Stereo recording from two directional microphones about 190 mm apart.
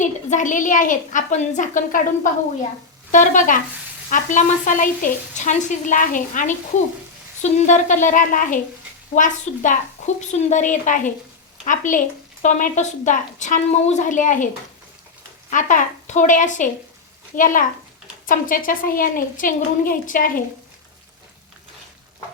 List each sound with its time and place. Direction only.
0.0 s a woman's voice: 40° left (ahead or behind)